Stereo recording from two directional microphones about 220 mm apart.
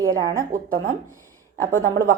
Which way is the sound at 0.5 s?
35° right (ahead or behind).